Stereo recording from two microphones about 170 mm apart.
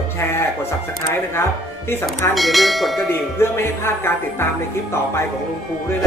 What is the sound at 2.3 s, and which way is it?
Speech, centre (ahead or behind).